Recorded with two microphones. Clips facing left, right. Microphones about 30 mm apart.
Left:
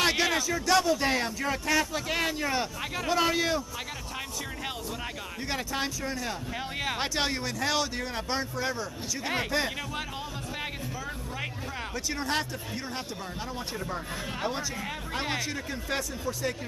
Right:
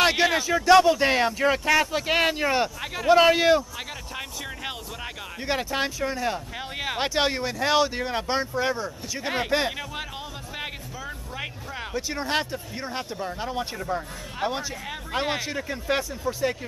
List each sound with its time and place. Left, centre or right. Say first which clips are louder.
0.0 s a man's voice: right 5 dB; centre
0.7 s speech: right 8 dB; right
2.8 s speech: right 2 dB; centre
3.1 s speech: right 9 dB; right
4.6 s speech: right 1 dB; centre
11.3 s speech: right 3 dB; centre
13.7 s speech: right 4 dB; centre